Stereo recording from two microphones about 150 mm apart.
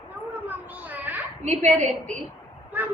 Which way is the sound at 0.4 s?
10° right (ahead or behind).